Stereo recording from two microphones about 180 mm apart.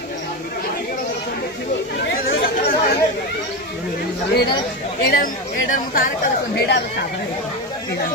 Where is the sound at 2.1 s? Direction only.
55° left (ahead or behind).